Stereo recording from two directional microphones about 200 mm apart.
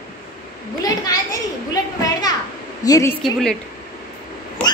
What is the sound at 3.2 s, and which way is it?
Speech, centre (ahead or behind).